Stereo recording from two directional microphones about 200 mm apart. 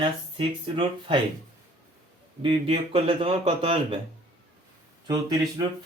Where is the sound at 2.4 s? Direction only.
30° right (ahead or behind).